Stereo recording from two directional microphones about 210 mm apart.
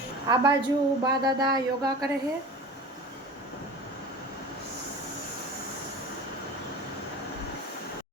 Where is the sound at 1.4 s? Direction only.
20° right (ahead or behind).